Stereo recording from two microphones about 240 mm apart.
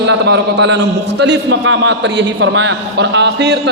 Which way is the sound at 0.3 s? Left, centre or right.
Right.